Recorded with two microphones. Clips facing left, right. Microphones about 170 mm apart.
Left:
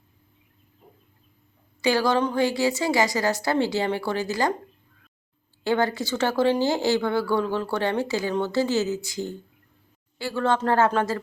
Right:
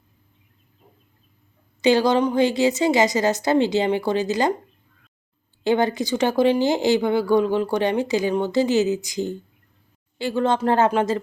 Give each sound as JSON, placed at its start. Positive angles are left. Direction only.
{"t": 1.8, "sound": "a woman's voice", "side_deg": -20}
{"t": 5.6, "sound": "a woman's voice", "side_deg": -20}